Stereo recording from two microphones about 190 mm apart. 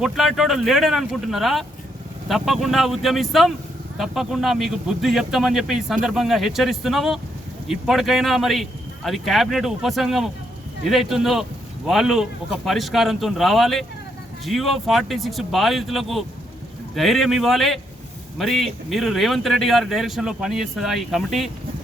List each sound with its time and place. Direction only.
0.0 s speech: centre (ahead or behind)